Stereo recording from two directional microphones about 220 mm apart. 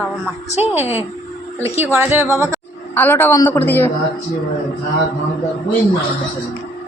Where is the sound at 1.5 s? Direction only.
10° right (ahead or behind).